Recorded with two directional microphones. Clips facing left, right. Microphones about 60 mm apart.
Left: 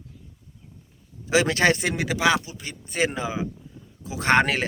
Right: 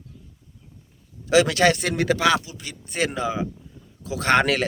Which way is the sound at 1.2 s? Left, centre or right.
Left.